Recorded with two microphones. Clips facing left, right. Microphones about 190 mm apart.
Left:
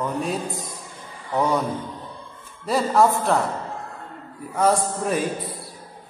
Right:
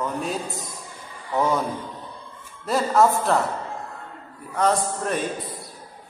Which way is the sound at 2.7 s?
Centre (ahead or behind).